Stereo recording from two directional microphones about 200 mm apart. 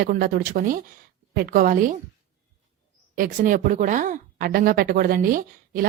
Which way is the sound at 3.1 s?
45° right (ahead or behind).